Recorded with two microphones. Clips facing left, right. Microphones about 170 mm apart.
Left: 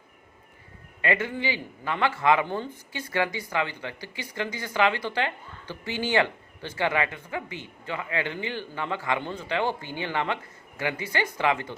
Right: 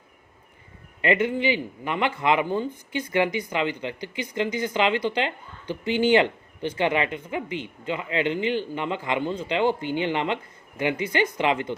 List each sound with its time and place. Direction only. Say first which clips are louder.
1.0 s speech: right 5 dB; 20° right (ahead or behind)